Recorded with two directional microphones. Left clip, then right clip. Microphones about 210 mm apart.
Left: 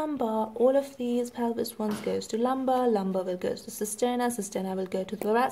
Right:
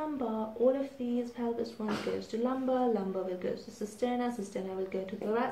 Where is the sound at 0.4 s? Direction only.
50° left (ahead or behind).